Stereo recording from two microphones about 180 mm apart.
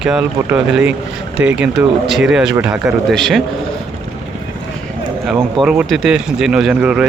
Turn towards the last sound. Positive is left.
turn(degrees=-5)  # may be behind; listen again after turning